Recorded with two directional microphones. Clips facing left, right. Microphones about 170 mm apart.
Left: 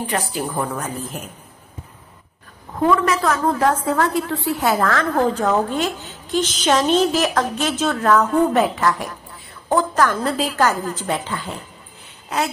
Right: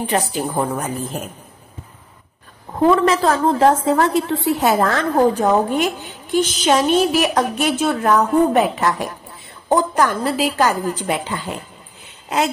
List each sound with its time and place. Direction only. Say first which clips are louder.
0.1 s a woman's voice: right 5 dB; 25° right (ahead or behind)
2.8 s a woman's voice: right 3 dB; 30° right (ahead or behind)